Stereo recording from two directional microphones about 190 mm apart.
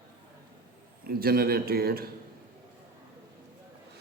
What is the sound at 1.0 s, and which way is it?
Speech, 50° right (ahead or behind).